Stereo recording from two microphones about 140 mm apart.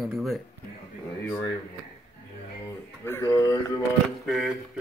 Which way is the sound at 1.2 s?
25° left (ahead or behind).